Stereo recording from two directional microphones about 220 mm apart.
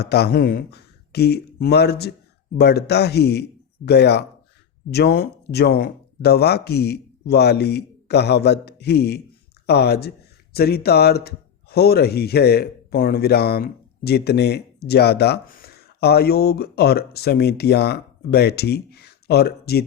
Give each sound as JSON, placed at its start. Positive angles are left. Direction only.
{"t": 0.0, "sound": "speech", "side_deg": 45}